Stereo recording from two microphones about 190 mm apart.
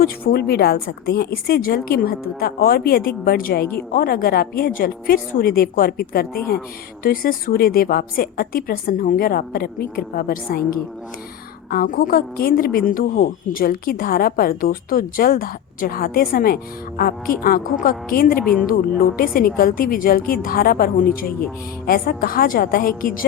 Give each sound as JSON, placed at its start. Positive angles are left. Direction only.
{"t": 0.0, "sound": "a woman's voice", "side_deg": 55}
{"t": 11.7, "sound": "a woman's voice", "side_deg": 50}